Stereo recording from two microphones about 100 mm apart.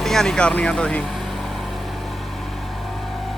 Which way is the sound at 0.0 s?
5° left (ahead or behind).